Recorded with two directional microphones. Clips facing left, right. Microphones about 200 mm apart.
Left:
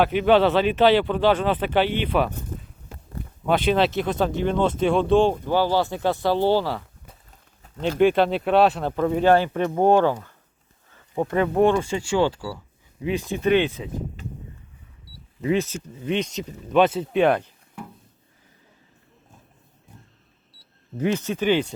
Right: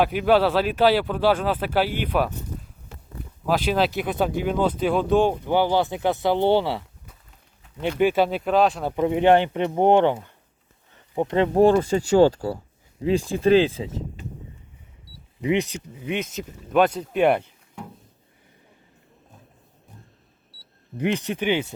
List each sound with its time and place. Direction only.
0.0 s speech: 5° right (ahead or behind)
3.4 s speech: centre (ahead or behind)
5.5 s speech: 15° right (ahead or behind)
7.9 s speech: 5° right (ahead or behind)
9.0 s speech: 20° right (ahead or behind)
15.4 s speech: 15° right (ahead or behind)
21.1 s speech: 15° right (ahead or behind)